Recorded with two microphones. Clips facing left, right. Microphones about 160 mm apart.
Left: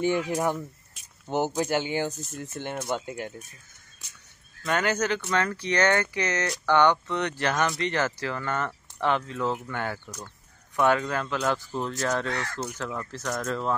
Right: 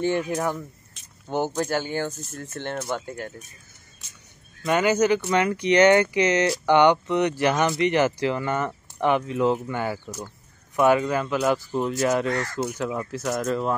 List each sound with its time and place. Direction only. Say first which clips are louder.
0.3 s speech: even; 10° left (ahead or behind)
4.6 s speech: right 6 dB; 10° right (ahead or behind)